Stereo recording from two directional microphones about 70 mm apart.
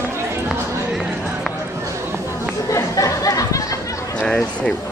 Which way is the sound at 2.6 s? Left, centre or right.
Left.